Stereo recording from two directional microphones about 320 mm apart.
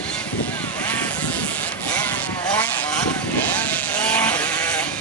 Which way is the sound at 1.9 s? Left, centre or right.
Centre.